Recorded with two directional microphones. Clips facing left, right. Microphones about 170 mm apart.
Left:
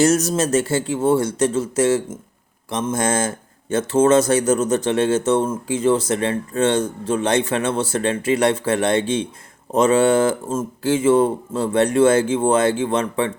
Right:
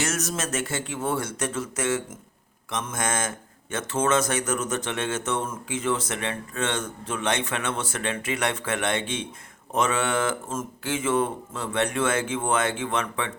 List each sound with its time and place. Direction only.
0.0 s speech: 35° left (ahead or behind)